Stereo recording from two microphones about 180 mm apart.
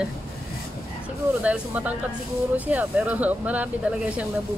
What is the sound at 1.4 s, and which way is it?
Speech, 10° right (ahead or behind).